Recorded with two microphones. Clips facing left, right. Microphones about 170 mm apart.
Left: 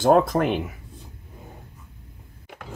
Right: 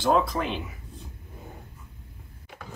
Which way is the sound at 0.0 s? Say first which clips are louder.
Left 6 dB; 50° left (ahead or behind).